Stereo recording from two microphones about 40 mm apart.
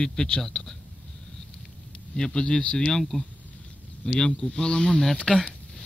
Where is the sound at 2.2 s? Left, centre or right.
Centre.